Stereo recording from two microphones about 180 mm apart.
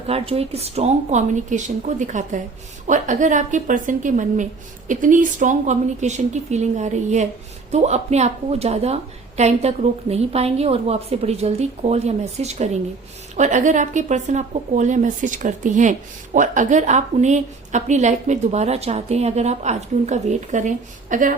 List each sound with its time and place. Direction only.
0.1 s a woman's voice: 35° right (ahead or behind)